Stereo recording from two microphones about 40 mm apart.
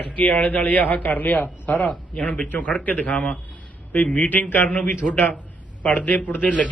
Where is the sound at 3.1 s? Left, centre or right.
Left.